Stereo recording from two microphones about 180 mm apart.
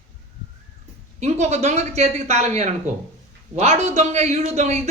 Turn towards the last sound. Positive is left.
turn(degrees=-40)  # may be behind; listen again after turning